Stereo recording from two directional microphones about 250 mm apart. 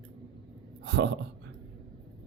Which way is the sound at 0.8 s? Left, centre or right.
Right.